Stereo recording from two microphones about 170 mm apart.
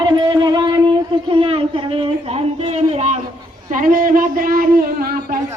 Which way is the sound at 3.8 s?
55° right (ahead or behind).